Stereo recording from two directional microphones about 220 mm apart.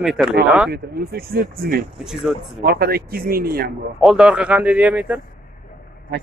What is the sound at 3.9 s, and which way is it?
Speech, 5° right (ahead or behind).